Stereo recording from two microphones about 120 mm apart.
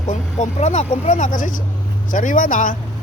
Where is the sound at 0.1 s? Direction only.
80° left.